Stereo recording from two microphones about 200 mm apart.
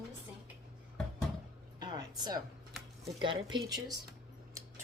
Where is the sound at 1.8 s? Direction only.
20° right (ahead or behind).